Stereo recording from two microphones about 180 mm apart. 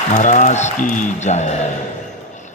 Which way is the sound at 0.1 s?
45° left (ahead or behind).